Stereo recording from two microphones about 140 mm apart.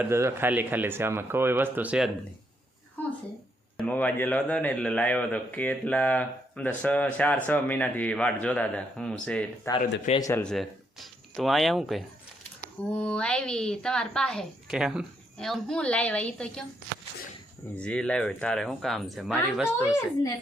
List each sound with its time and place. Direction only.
0.0 s speech: 20° right (ahead or behind)
3.8 s a man's voice: 10° left (ahead or behind)
10.2 s speech: 20° left (ahead or behind)
10.4 s a woman's voice: centre (ahead or behind)
17.7 s a woman's voice: 5° left (ahead or behind)